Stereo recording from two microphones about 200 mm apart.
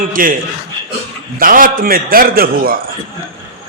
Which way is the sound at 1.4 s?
45° right (ahead or behind).